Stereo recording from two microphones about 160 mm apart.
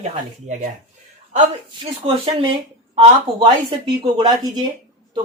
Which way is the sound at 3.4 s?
30° right (ahead or behind).